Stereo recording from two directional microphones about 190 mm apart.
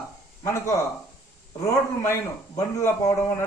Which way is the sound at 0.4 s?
15° left (ahead or behind).